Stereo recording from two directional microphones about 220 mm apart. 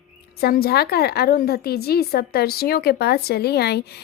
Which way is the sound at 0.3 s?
45° left (ahead or behind).